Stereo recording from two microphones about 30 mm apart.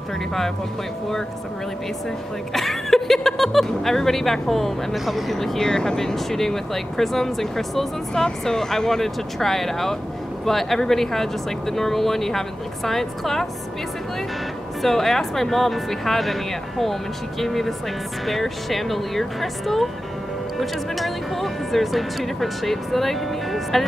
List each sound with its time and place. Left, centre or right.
2.5 s a sound: centre
3.5 s speech: centre
4.9 s speech: centre
5.6 s speech: left
14.8 s speech: centre
20.9 s speech: centre